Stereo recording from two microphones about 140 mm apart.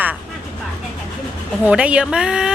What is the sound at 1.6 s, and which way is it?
Speech, 10° right (ahead or behind).